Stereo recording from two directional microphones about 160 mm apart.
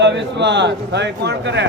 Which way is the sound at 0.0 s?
90° right.